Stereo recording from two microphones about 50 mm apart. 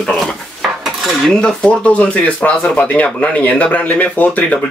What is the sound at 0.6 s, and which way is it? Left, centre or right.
Cutlery, centre.